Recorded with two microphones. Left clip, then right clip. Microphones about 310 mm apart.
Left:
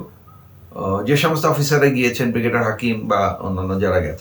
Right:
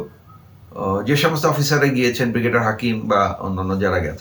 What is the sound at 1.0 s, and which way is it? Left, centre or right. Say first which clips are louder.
Speech: left 1 dB; centre.